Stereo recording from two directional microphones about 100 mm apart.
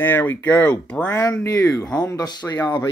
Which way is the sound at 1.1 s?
30° left (ahead or behind).